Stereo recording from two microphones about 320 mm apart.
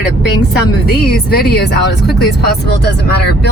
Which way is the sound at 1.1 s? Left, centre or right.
Left.